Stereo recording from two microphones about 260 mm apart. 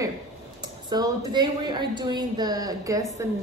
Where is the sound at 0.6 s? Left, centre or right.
Centre.